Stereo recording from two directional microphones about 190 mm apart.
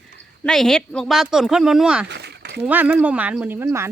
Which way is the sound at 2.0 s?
60° right (ahead or behind).